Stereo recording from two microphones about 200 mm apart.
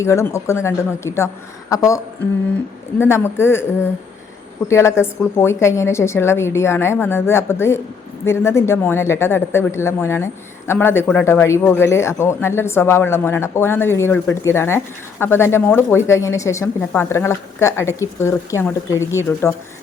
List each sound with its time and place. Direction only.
0.0 s speech: 15° left (ahead or behind)
3.0 s speech: 10° left (ahead or behind)
4.7 s speech: 15° left (ahead or behind)